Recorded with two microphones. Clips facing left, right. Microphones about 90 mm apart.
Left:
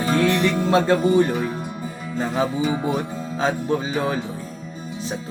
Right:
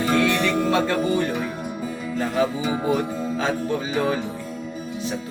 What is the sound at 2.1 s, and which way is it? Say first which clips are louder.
Music: left 1 dB; 25° left (ahead or behind).